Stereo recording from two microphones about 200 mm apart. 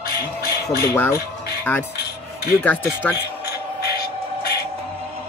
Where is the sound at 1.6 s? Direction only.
10° left (ahead or behind).